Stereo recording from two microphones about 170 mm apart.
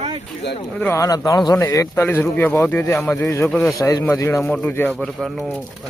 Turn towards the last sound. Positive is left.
turn(degrees=10)  # may be behind; listen again after turning